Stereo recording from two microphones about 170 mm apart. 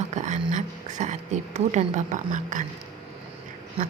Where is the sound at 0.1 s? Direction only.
45° right (ahead or behind).